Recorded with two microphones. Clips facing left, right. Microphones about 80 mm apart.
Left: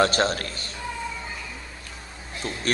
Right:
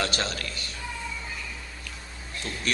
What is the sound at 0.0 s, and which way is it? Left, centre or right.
Speech, left.